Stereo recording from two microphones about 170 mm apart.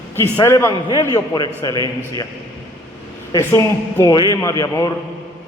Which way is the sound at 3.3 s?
20° left (ahead or behind).